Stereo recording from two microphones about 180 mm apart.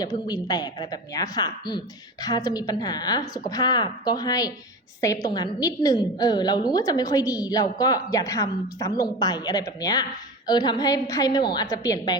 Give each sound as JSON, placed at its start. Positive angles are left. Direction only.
{"t": 0.0, "sound": "a woman's voice", "side_deg": 20}